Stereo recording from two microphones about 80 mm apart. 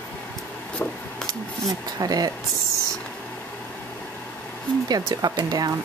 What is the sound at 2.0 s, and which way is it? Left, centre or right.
Speech, right.